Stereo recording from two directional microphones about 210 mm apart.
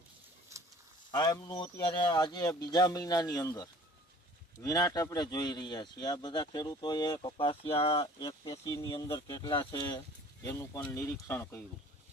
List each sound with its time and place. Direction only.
1.1 s speech: 20° left (ahead or behind)